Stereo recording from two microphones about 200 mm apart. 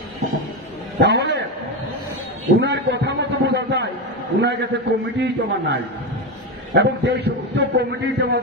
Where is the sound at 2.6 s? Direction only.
60° right (ahead or behind).